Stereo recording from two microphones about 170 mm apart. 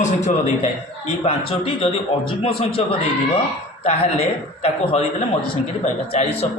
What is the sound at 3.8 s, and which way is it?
A man's voice, 40° left (ahead or behind).